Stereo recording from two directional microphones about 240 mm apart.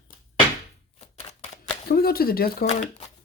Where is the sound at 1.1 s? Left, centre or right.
Left.